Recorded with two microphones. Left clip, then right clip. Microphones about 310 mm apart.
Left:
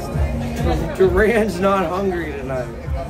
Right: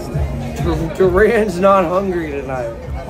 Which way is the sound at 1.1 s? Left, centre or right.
Centre.